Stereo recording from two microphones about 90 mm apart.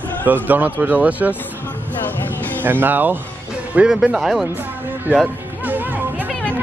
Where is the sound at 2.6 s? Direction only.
20° right (ahead or behind).